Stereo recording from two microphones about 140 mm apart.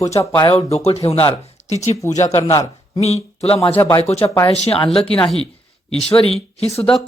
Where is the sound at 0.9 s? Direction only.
45° left (ahead or behind).